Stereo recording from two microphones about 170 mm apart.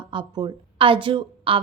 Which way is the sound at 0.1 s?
25° right (ahead or behind).